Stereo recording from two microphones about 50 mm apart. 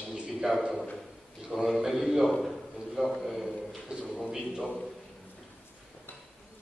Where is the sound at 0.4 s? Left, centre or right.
Centre.